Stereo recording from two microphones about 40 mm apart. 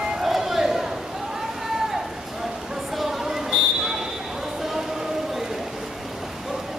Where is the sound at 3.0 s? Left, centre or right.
Centre.